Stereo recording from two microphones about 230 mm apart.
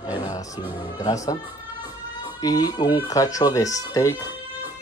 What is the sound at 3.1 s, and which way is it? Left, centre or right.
Speech, centre.